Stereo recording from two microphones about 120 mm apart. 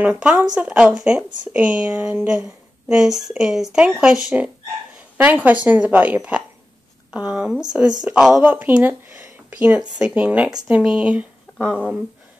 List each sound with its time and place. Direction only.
0.0 s a woman's voice: 10° right (ahead or behind)